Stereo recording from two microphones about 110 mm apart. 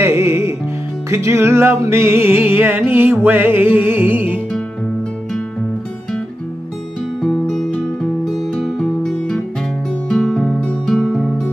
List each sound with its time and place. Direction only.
0.0 s music: 25° right (ahead or behind)
7.2 s music: 5° left (ahead or behind)